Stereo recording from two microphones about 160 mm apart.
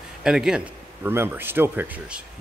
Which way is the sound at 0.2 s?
5° right (ahead or behind).